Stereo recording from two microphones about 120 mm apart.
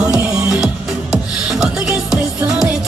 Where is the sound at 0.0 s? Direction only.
25° right (ahead or behind).